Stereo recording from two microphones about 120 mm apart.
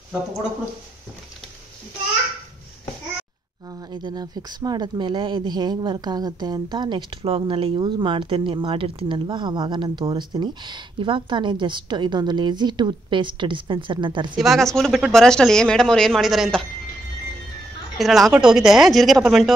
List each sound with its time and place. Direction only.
3.9 s speech: 35° right (ahead or behind)
14.3 s speech: centre (ahead or behind)
17.9 s speech: centre (ahead or behind)